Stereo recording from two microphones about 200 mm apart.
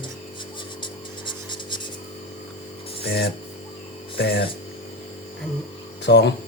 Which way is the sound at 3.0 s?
55° left (ahead or behind).